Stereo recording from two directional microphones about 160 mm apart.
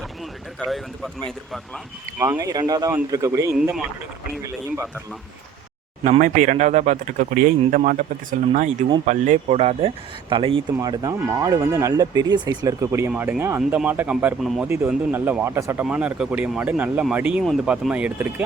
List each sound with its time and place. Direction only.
0.6 s speech: centre (ahead or behind)
2.1 s speech: 15° right (ahead or behind)
6.1 s speech: 55° right (ahead or behind); by 18.4 s 10° right (ahead or behind)